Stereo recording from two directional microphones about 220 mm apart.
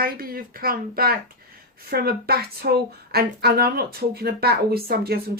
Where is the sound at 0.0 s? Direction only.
40° right (ahead or behind).